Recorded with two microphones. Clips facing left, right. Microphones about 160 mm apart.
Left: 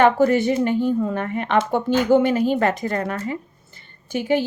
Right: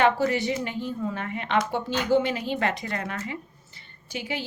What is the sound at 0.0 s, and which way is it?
A woman's voice, 50° left (ahead or behind).